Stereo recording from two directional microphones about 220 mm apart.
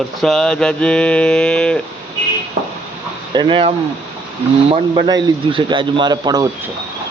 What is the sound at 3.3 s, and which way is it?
A man's voice, 20° right (ahead or behind).